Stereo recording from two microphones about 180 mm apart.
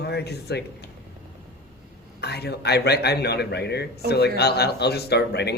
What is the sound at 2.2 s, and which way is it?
Speech, 65° left (ahead or behind).